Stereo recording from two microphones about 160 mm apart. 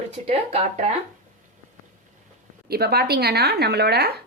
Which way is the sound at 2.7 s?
80° right.